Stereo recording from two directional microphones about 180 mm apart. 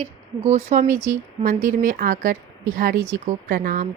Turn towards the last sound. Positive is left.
turn(degrees=-45)  # may be behind; listen again after turning